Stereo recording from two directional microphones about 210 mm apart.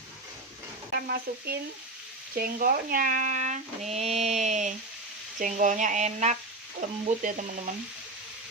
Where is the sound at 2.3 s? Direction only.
45° right (ahead or behind).